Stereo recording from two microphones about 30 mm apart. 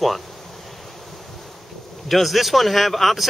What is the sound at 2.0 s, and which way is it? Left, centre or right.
Speech, centre.